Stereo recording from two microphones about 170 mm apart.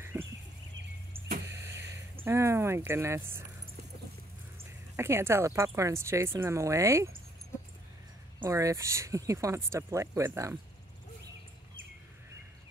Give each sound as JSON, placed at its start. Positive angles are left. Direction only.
{"t": 0.0, "sound": "a sound", "side_deg": -15}
{"t": 2.2, "sound": "speech", "side_deg": -15}
{"t": 4.9, "sound": "speech", "side_deg": -15}
{"t": 8.4, "sound": "speech", "side_deg": -20}